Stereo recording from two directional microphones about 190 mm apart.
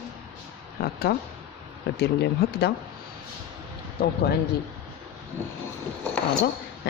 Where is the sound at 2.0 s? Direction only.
60° left (ahead or behind).